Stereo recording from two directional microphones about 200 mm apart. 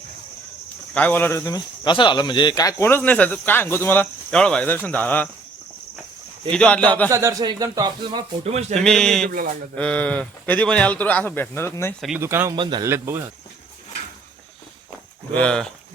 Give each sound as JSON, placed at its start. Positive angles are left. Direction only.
{"t": 0.9, "sound": "speech", "side_deg": 10}
{"t": 6.5, "sound": "speech", "side_deg": 5}
{"t": 7.1, "sound": "speech", "side_deg": -15}
{"t": 8.8, "sound": "speech", "side_deg": 5}
{"t": 11.9, "sound": "speech", "side_deg": 0}
{"t": 12.2, "sound": "speech", "side_deg": -15}
{"t": 15.3, "sound": "speech", "side_deg": 5}